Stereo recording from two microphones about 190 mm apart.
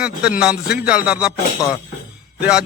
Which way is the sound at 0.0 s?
5° right (ahead or behind).